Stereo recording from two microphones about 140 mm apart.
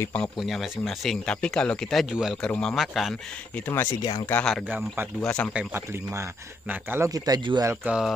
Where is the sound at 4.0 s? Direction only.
30° left (ahead or behind).